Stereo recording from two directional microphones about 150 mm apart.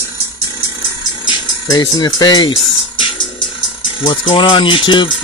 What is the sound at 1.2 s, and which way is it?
Speech, 30° left (ahead or behind).